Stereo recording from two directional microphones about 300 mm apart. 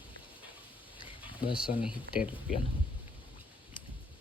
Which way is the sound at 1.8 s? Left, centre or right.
Centre.